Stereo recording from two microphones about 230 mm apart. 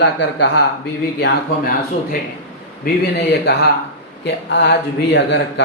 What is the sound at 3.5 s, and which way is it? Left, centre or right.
Speech, left.